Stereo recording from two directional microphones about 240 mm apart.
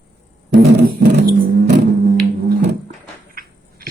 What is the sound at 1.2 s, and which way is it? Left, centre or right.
Music, right.